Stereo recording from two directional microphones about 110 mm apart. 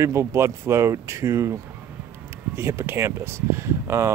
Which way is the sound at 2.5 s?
25° right (ahead or behind).